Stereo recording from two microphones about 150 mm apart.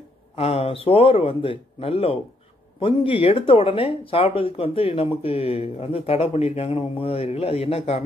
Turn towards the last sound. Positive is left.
turn(degrees=40)  # may be behind; listen again after turning